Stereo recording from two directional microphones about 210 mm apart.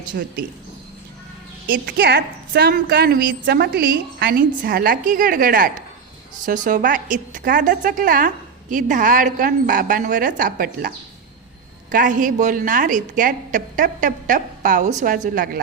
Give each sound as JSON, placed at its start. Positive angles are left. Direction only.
{"t": 0.1, "sound": "a woman's voice", "side_deg": -45}
{"t": 1.7, "sound": "a woman's voice", "side_deg": -45}